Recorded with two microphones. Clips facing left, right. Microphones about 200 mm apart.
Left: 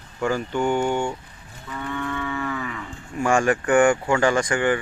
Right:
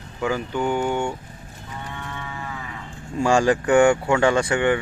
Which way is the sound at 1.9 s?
90° left.